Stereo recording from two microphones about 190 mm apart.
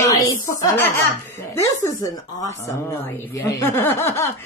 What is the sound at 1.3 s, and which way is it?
Speech, 15° left (ahead or behind).